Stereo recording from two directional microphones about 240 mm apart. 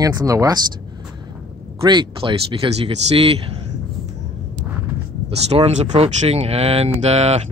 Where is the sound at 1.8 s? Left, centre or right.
Centre.